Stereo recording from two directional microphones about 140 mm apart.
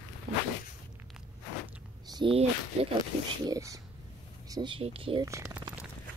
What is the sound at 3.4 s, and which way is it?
Speech, 25° right (ahead or behind).